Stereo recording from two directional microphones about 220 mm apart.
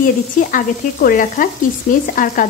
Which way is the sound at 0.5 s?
40° left (ahead or behind).